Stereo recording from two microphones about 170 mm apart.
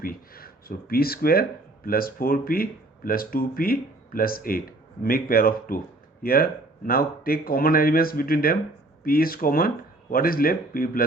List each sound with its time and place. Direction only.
0.0 s speech: 60° left (ahead or behind)